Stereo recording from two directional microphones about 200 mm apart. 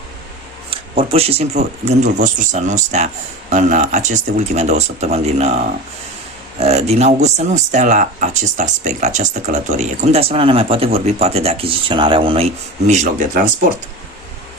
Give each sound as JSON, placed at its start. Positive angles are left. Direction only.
{"t": 0.7, "sound": "speech", "side_deg": -30}
{"t": 12.9, "sound": "speech", "side_deg": -35}